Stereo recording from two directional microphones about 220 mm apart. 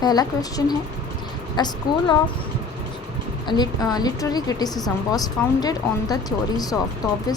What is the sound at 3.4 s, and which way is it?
A woman's voice, 20° left (ahead or behind).